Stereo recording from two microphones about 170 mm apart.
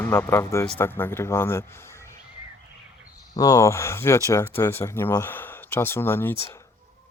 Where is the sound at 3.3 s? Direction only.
20° left (ahead or behind).